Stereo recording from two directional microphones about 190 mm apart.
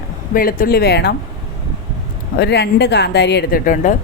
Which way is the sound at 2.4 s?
60° left (ahead or behind).